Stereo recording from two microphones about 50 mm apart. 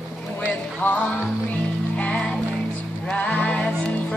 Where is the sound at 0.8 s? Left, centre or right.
Left.